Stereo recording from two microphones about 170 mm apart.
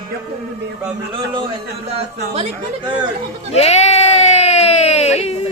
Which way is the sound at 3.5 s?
40° left (ahead or behind).